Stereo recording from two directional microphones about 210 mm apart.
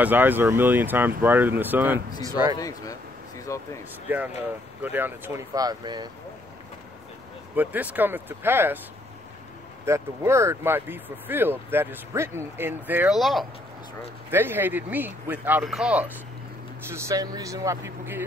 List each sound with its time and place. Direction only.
0.0 s speech: 10° right (ahead or behind)
2.6 s speech: 15° left (ahead or behind)
4.8 s speech: 10° right (ahead or behind)
7.5 s speech: 10° right (ahead or behind)
9.8 s speech: 15° right (ahead or behind)
14.3 s speech: 10° right (ahead or behind)